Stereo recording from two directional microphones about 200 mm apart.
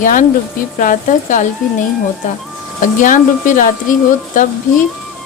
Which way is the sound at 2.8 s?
40° left (ahead or behind).